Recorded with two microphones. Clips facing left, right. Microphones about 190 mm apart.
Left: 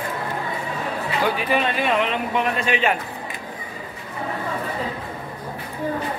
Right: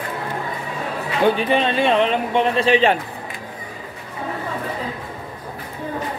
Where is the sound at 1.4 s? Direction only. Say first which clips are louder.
Right 3 dB; 25° right (ahead or behind).